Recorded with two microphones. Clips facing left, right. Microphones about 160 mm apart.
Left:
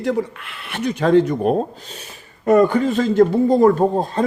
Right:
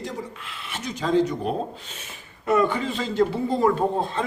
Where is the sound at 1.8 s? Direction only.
35° left (ahead or behind).